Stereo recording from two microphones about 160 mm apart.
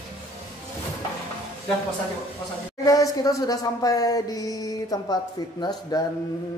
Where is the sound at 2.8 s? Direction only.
20° left (ahead or behind).